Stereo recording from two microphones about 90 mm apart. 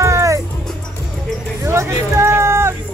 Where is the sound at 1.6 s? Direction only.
30° right (ahead or behind).